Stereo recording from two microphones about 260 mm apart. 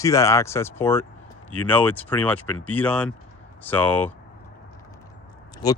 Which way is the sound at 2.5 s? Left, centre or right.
Left.